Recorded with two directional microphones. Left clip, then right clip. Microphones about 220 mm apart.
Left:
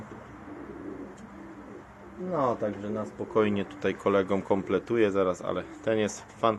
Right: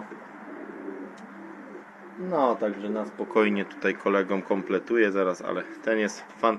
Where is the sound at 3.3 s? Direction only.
Centre (ahead or behind).